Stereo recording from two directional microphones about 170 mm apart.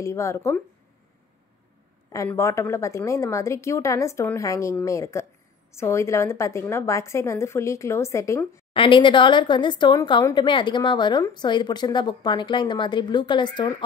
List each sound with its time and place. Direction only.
0.0 s a woman's voice: 15° left (ahead or behind)
2.1 s a woman's voice: 15° left (ahead or behind)
8.7 s speech: 30° left (ahead or behind)